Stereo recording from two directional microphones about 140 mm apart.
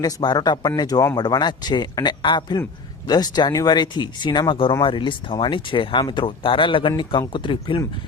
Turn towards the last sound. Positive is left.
turn(degrees=35)  # may be behind; listen again after turning